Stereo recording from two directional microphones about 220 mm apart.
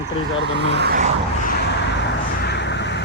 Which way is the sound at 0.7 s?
50° right (ahead or behind).